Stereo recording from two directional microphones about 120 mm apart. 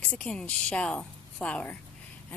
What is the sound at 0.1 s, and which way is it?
A woman's voice, 5° left (ahead or behind).